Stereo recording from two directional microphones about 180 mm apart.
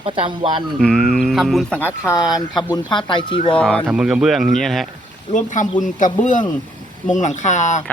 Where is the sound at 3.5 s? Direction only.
5° left (ahead or behind).